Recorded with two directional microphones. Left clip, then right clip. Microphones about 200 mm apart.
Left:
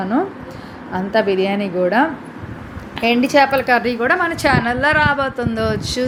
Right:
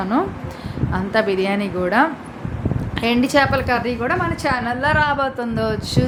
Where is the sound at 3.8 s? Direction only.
20° left (ahead or behind).